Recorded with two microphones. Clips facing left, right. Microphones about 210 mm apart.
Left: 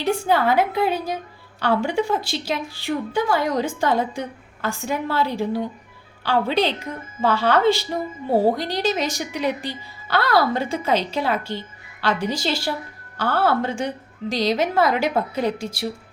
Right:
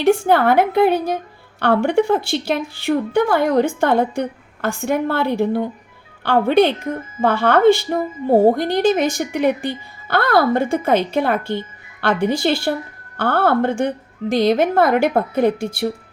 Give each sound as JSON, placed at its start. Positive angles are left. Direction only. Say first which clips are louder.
{"t": 0.1, "sound": "a woman's voice", "louder": "right 5 dB", "side_deg": -60}